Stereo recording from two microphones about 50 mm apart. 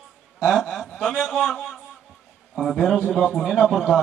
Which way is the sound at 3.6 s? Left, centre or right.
Centre.